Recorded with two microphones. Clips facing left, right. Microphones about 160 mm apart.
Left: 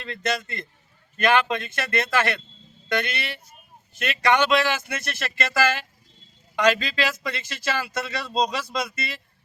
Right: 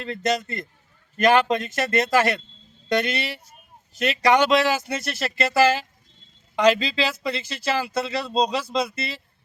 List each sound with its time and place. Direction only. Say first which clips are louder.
0.1 s speech: right 3 dB; 40° right (ahead or behind)